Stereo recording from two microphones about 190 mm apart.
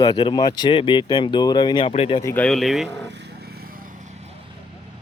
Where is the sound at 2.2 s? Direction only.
10° left (ahead or behind).